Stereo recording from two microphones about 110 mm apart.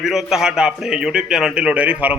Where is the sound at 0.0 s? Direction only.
5° right (ahead or behind).